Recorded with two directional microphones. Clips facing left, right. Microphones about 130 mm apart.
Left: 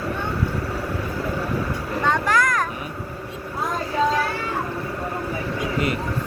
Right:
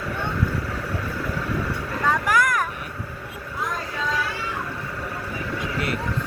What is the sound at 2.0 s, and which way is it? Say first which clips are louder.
Vehicle: even; 5° right (ahead or behind).